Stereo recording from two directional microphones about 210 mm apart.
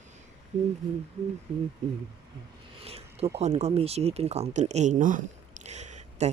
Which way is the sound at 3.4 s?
30° right (ahead or behind).